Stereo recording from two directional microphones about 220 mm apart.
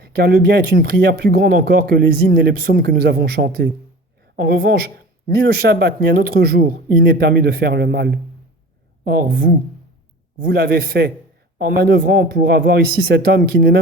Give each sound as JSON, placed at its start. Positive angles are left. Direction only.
{"t": 0.0, "sound": "speech", "side_deg": -45}